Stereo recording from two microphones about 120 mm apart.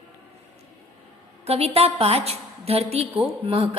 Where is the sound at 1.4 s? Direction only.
60° right (ahead or behind).